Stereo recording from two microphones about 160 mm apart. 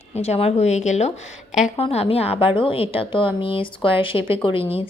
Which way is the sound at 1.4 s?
5° right (ahead or behind).